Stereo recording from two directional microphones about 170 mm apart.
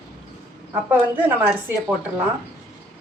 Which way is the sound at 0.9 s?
10° right (ahead or behind).